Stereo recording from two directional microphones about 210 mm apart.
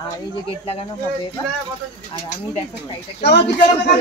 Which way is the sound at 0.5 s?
25° left (ahead or behind).